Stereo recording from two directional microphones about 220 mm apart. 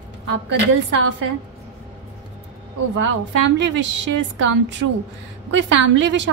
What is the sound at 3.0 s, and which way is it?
A woman's voice, 55° right (ahead or behind).